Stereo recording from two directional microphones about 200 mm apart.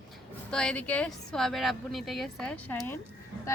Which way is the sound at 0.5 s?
5° left (ahead or behind).